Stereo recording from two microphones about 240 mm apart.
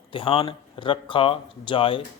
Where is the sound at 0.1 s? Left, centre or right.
Left.